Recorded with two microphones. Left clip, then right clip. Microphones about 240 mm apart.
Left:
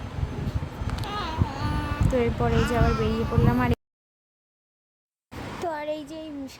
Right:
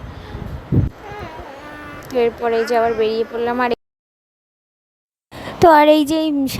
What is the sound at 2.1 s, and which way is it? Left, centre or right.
A woman's voice, right.